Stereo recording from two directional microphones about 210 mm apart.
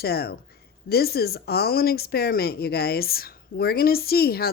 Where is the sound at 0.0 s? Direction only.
50° left (ahead or behind).